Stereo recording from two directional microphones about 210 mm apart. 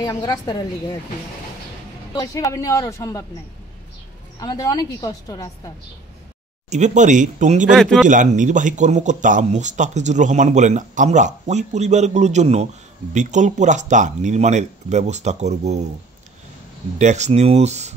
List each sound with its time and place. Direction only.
0.0 s a woman's voice: 20° left (ahead or behind)
2.1 s a woman's voice: 15° left (ahead or behind)
4.4 s a woman's voice: 15° left (ahead or behind)
6.7 s speech: 35° right (ahead or behind)
7.6 s a man's voice: centre (ahead or behind)
8.1 s speech: 35° right (ahead or behind)
17.0 s speech: 35° right (ahead or behind)